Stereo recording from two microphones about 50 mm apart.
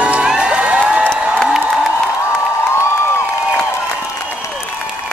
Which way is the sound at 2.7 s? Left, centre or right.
Left.